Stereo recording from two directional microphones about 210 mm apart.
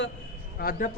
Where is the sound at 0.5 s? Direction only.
40° left (ahead or behind).